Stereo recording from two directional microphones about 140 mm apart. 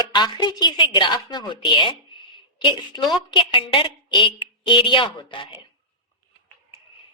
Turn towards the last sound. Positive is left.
turn(degrees=35)  # may be behind; listen again after turning